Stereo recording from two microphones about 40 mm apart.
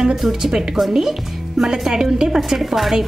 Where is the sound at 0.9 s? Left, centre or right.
Centre.